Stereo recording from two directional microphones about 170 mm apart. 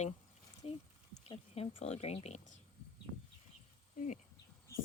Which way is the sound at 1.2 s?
35° left (ahead or behind).